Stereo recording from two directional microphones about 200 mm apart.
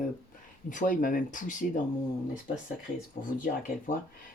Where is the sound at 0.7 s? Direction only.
40° left (ahead or behind).